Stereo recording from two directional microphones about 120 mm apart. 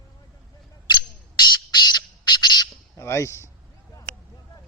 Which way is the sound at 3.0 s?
25° left (ahead or behind).